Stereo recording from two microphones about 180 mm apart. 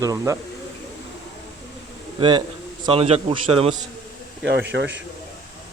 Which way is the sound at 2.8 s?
30° right (ahead or behind).